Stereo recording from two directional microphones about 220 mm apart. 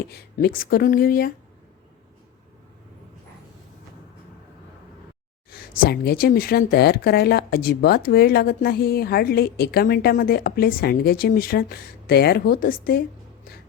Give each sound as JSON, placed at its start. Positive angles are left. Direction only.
{"t": 0.1, "sound": "speech", "side_deg": 45}
{"t": 5.5, "sound": "speech", "side_deg": 45}